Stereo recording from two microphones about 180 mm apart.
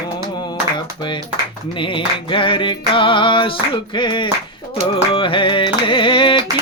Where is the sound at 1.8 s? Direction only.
30° left (ahead or behind).